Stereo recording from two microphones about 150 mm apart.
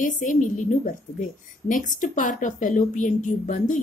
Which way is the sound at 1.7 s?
60° left (ahead or behind).